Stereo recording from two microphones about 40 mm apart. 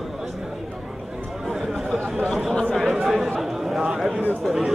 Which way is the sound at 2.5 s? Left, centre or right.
Left.